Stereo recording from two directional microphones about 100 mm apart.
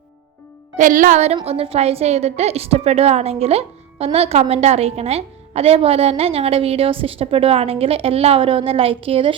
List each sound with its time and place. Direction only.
1.5 s a woman's voice: 80° right; by 9.3 s 65° right (ahead or behind)